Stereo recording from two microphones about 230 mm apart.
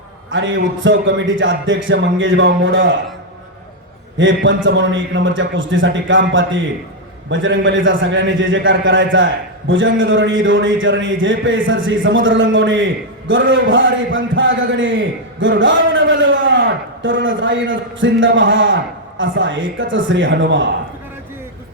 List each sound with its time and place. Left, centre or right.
0.3 s a man's voice: right
4.2 s a man's voice: right